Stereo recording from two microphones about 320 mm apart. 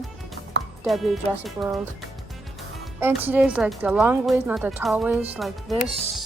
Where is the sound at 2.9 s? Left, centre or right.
Centre.